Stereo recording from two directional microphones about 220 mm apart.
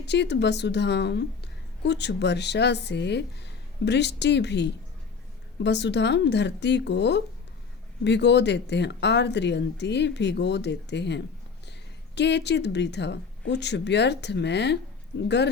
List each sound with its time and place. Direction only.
0.0 s a woman's voice: 50° left (ahead or behind)